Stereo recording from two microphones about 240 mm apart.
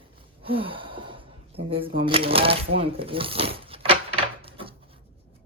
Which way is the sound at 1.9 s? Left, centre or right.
Right.